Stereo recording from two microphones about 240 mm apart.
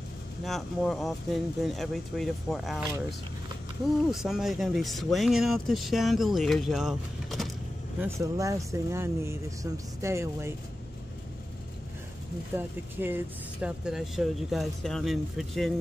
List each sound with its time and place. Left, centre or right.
0.5 s speech: centre
4.1 s speech: centre
8.0 s speech: centre
12.5 s speech: centre